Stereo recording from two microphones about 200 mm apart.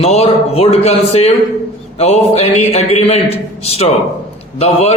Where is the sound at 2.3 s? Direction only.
30° left (ahead or behind).